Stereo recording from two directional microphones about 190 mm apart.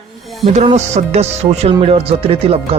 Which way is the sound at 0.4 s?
35° right (ahead or behind).